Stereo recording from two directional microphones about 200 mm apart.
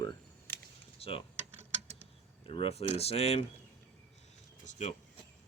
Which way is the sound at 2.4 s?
30° left (ahead or behind).